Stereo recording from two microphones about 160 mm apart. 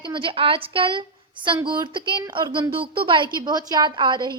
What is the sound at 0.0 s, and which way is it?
A woman's voice, 30° right (ahead or behind).